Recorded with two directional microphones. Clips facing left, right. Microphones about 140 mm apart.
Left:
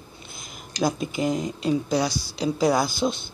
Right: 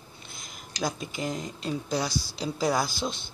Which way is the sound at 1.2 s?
5° left (ahead or behind).